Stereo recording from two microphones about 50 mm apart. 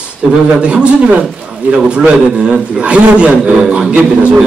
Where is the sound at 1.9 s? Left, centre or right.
Right.